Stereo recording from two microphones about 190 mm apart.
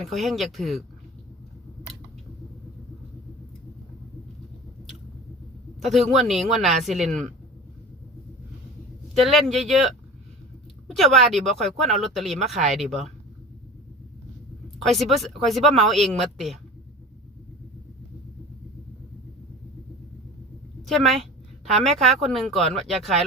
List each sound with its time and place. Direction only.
0.0 s speech: centre (ahead or behind)
5.8 s speech: centre (ahead or behind)
9.2 s speech: centre (ahead or behind)
14.8 s speech: centre (ahead or behind)
20.8 s a woman's voice: centre (ahead or behind)